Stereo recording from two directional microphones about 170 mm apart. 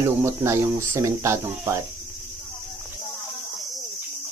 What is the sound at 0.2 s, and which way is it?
Speech, 15° right (ahead or behind).